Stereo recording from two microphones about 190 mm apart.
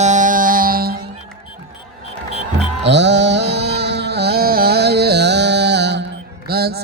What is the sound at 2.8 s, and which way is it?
Music, 65° right (ahead or behind).